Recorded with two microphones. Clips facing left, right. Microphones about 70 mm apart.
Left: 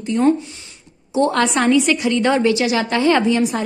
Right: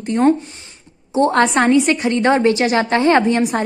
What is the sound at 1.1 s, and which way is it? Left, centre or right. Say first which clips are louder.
A woman's voice: right 2 dB; right.